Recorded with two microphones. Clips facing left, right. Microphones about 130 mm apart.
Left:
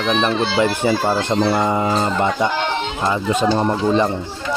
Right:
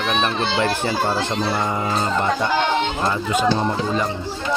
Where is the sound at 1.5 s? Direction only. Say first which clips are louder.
Left 5 dB; 20° left (ahead or behind).